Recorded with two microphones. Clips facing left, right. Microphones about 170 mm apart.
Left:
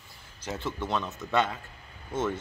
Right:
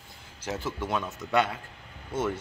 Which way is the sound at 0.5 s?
10° right (ahead or behind).